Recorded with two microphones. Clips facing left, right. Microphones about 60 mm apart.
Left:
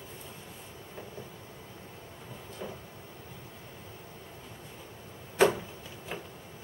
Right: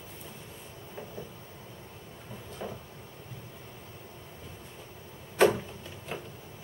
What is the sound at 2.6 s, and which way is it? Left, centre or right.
Cupboard open or close, centre.